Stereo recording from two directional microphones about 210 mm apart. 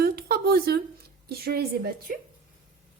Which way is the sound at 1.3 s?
50° right (ahead or behind).